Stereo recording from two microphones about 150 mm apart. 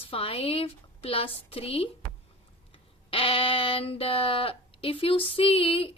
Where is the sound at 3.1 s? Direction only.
35° left (ahead or behind).